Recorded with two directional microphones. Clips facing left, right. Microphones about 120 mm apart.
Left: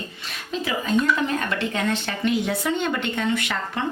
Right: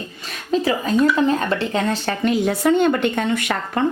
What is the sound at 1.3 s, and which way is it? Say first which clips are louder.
A woman's voice: right 5 dB; 30° right (ahead or behind).